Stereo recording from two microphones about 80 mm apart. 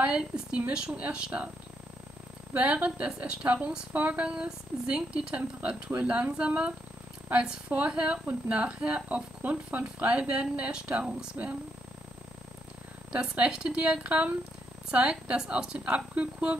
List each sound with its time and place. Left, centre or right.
0.0 s a woman's voice: centre
2.5 s a woman's voice: centre
13.1 s a woman's voice: centre